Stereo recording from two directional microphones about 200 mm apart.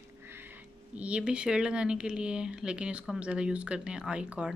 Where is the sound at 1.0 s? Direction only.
5° right (ahead or behind).